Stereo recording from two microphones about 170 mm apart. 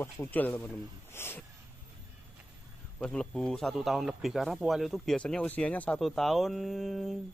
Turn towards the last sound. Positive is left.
turn(degrees=0)  # may be behind; listen again after turning